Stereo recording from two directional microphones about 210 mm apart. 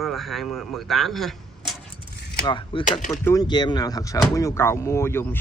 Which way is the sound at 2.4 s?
25° left (ahead or behind).